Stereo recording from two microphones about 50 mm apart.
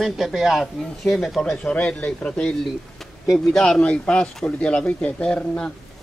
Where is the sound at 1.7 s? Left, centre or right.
Centre.